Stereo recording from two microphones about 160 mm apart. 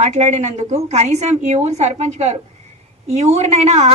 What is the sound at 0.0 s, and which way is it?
A woman's voice, 45° right (ahead or behind).